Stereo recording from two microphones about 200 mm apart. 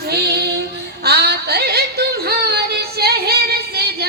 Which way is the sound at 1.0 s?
55° right (ahead or behind).